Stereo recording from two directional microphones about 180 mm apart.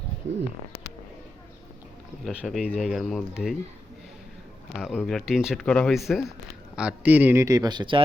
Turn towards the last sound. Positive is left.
turn(degrees=-25)  # may be behind; listen again after turning